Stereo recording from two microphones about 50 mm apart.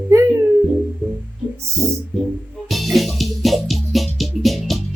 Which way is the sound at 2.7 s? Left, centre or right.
Centre.